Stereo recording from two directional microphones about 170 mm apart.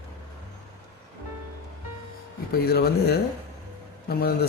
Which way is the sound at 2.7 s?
70° left (ahead or behind).